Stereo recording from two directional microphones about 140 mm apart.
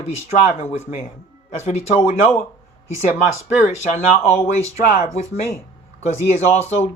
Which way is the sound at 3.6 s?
55° left (ahead or behind).